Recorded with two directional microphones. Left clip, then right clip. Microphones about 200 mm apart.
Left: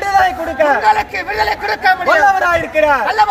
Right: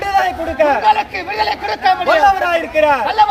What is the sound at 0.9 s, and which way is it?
Speech, 10° left (ahead or behind).